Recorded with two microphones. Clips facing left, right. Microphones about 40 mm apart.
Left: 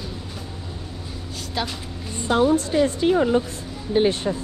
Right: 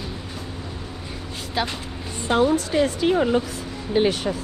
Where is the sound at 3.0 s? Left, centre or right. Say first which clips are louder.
Left 1 dB; right.